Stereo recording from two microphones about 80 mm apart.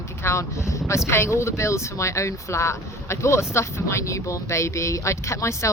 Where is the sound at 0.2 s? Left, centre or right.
Left.